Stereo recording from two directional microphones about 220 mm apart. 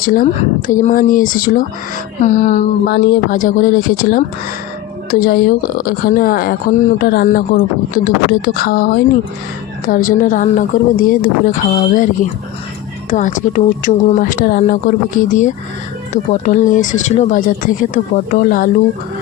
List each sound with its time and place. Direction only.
0.0 s speech: 40° left (ahead or behind)
2.8 s speech: 45° left (ahead or behind)